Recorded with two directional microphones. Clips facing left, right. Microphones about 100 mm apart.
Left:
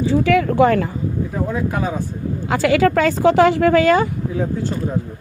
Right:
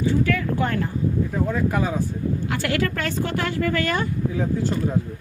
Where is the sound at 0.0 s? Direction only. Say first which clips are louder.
Left 6 dB; 90° left.